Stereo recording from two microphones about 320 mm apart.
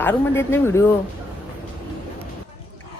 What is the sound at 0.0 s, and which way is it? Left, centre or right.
Speech, centre.